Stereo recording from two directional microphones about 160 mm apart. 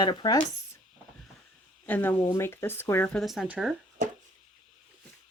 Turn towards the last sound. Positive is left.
turn(degrees=-50)  # may be behind; listen again after turning